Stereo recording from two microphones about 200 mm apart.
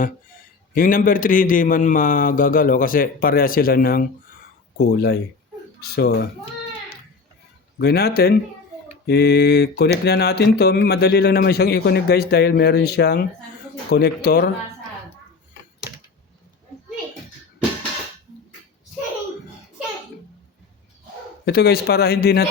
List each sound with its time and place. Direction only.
0.7 s a man's voice: 45° left (ahead or behind)
7.8 s a man's voice: 50° left (ahead or behind)
9.0 s mantra: 55° left (ahead or behind)
10.0 s a man's voice: 55° left (ahead or behind)
21.4 s a man's voice: 55° left (ahead or behind)